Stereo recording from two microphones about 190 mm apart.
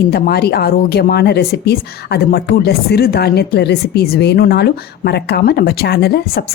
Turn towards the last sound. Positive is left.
turn(degrees=55)  # may be behind; listen again after turning